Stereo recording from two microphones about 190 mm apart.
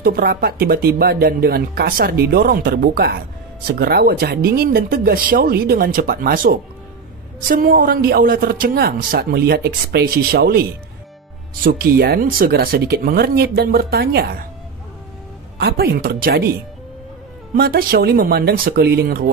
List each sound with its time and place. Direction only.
0.0 s speech: 50° right (ahead or behind)
15.5 s a woman's voice: 55° right (ahead or behind)
17.6 s speech: 55° right (ahead or behind)